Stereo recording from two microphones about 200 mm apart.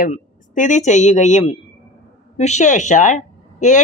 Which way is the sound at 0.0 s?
40° left (ahead or behind).